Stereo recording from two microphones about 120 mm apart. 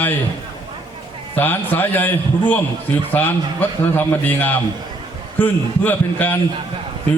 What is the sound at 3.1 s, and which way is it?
A man's voice, 15° left (ahead or behind).